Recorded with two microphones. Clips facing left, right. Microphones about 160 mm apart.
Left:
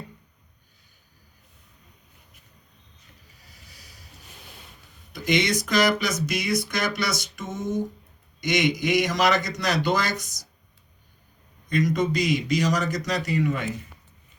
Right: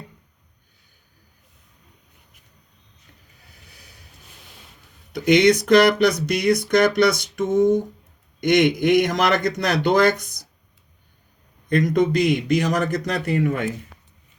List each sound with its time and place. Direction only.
3.7 s vehicle: 60° right (ahead or behind)
5.1 s speech: 60° right (ahead or behind)
11.7 s speech: 55° right (ahead or behind)